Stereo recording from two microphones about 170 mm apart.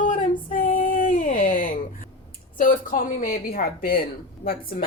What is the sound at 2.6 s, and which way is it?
Speech, 50° left (ahead or behind).